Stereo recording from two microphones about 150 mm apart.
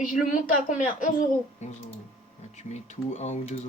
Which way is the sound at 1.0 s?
60° left (ahead or behind).